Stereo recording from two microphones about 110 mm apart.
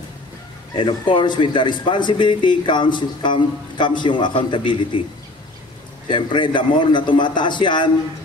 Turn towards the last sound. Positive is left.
turn(degrees=45)  # may be behind; listen again after turning